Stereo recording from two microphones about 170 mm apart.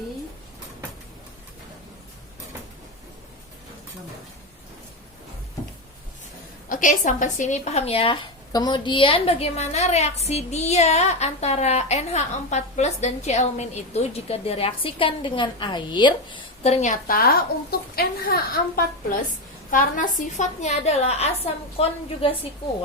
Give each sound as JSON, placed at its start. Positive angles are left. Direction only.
{"t": 6.7, "sound": "speech", "side_deg": 50}
{"t": 17.1, "sound": "a woman's voice", "side_deg": 60}
{"t": 19.7, "sound": "a woman's voice", "side_deg": 50}